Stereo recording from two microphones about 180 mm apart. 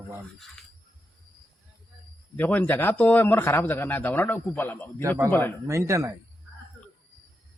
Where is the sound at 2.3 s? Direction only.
10° left (ahead or behind).